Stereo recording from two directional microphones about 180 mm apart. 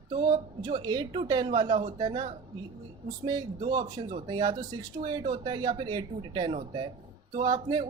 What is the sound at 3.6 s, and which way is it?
Speech, 25° right (ahead or behind).